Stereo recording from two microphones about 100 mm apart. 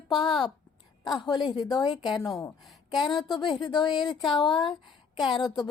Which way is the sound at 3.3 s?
45° left (ahead or behind).